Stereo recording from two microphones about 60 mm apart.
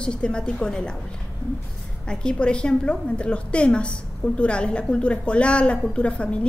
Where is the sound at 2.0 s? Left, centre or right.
Centre.